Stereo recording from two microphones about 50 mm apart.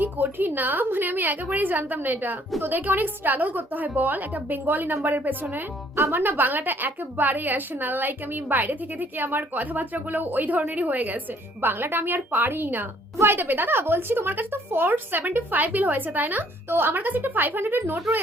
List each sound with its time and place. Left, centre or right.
0.0 s a woman's voice: right
16.6 s speech: right